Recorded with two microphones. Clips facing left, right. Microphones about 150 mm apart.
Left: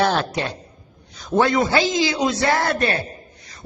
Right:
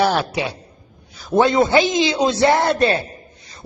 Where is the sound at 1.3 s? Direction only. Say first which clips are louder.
Right 3 dB; 25° right (ahead or behind).